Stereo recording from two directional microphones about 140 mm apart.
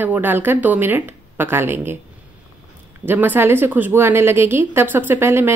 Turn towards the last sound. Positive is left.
turn(degrees=-15)  # may be behind; listen again after turning